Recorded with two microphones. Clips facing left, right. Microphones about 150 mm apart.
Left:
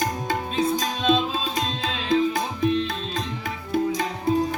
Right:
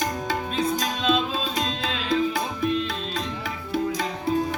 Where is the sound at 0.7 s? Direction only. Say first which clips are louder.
Left 1 dB; 30° left (ahead or behind).